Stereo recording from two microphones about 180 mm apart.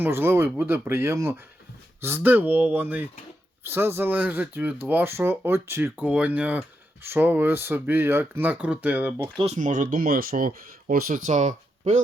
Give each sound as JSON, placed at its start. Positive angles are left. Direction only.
{"t": 0.0, "sound": "speech", "side_deg": -10}
{"t": 9.4, "sound": "speech", "side_deg": -40}